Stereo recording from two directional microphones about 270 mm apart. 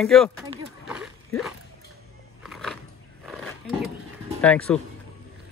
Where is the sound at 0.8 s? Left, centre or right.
Centre.